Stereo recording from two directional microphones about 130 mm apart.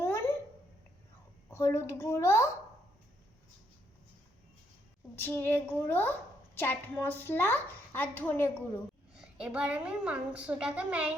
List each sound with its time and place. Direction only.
0.0 s a sound: 20° left (ahead or behind)
1.5 s a woman's voice: 20° left (ahead or behind)
5.1 s a woman's voice: 15° left (ahead or behind)
9.2 s a woman's voice: 10° right (ahead or behind)